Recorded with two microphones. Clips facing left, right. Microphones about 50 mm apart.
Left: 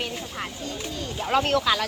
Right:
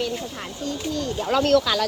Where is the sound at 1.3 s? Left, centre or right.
Left.